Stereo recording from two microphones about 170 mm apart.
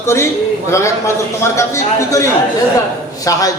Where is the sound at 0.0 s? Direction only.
15° left (ahead or behind).